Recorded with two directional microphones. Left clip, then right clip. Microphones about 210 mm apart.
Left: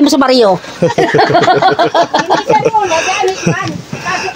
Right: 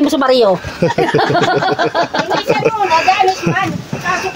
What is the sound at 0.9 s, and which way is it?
Speech, 35° left (ahead or behind).